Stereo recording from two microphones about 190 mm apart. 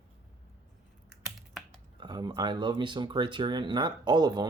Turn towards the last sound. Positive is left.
turn(degrees=-20)  # may be behind; listen again after turning